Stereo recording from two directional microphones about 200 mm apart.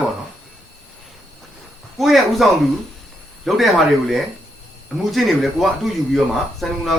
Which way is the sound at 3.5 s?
Centre (ahead or behind).